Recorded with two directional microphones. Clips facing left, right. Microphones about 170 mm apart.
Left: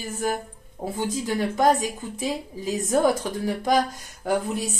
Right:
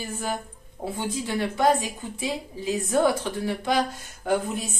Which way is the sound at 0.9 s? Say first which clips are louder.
Left 2 dB; 45° left (ahead or behind).